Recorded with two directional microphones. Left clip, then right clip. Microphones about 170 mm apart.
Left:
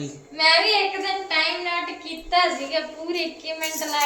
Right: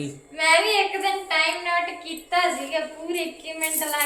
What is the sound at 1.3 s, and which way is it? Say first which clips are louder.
Child singing: even; 55° right (ahead or behind).